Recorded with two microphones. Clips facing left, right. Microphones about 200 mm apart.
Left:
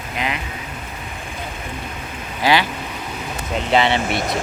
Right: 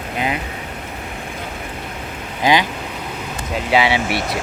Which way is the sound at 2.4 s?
15° right (ahead or behind).